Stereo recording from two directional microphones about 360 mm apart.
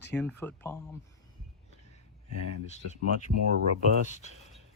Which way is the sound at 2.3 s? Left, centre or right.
Left.